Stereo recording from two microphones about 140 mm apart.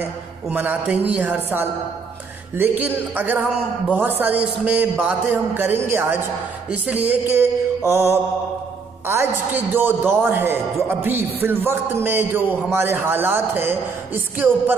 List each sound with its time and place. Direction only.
0.5 s a man's voice: 10° right (ahead or behind)